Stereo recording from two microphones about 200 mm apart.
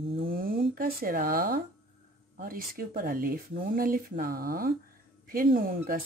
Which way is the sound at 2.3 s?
45° right (ahead or behind).